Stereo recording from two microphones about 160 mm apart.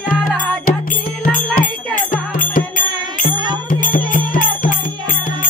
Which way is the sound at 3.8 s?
60° left (ahead or behind).